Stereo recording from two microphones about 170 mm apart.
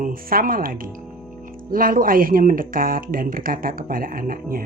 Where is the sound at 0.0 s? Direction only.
55° right (ahead or behind).